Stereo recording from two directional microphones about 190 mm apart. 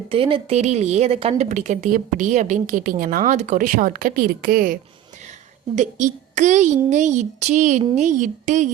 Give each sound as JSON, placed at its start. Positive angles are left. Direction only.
{"t": 0.1, "sound": "a woman's voice", "side_deg": -30}